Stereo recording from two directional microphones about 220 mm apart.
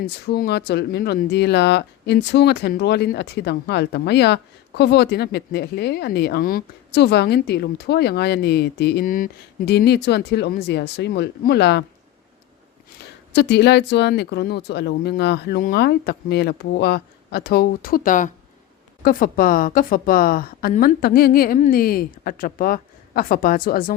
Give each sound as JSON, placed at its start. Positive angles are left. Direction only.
{"t": 0.0, "sound": "speech", "side_deg": 50}
{"t": 13.3, "sound": "a woman's voice", "side_deg": 50}